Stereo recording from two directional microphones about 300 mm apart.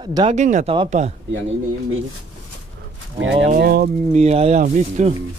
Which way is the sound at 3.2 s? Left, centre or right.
Right.